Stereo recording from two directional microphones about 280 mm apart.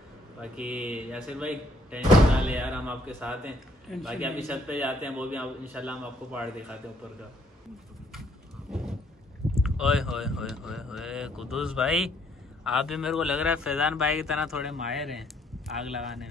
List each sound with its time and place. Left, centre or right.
0.4 s speech: centre
8.1 s a sound: centre
9.6 s speech: centre